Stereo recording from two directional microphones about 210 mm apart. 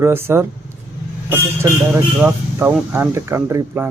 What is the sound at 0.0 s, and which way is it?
Speech, 10° right (ahead or behind).